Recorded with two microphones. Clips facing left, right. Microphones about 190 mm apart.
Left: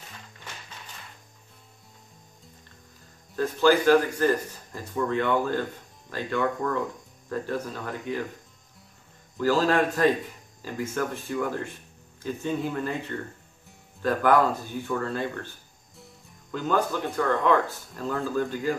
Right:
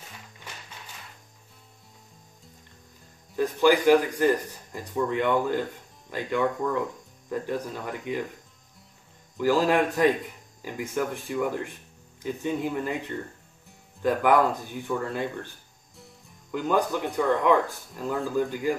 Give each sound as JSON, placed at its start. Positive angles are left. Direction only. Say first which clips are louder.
{"t": 3.3, "sound": "speech", "louder": "even", "side_deg": -15}
{"t": 9.4, "sound": "speech", "louder": "even", "side_deg": -15}
{"t": 14.0, "sound": "speech", "louder": "even", "side_deg": -15}
{"t": 16.5, "sound": "speech", "louder": "right 1 dB", "side_deg": -15}